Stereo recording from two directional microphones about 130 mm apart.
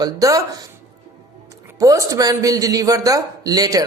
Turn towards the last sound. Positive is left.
turn(degrees=-30)  # may be behind; listen again after turning